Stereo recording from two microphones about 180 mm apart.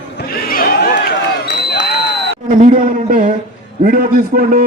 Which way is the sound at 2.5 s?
45° right (ahead or behind).